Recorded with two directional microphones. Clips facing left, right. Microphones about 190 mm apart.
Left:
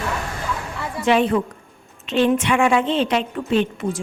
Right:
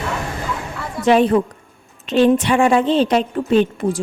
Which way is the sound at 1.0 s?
40° right (ahead or behind).